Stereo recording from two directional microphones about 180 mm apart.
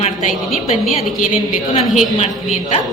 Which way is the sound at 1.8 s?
Centre (ahead or behind).